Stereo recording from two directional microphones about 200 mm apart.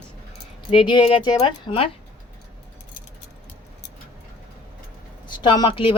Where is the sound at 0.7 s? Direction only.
25° left (ahead or behind).